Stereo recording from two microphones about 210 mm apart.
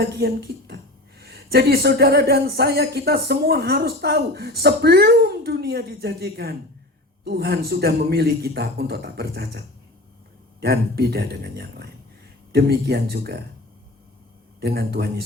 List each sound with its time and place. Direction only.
0.0 s speech: 50° right (ahead or behind)
14.6 s speech: 50° right (ahead or behind)